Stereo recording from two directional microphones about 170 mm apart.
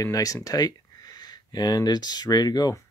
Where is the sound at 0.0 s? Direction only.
20° left (ahead or behind).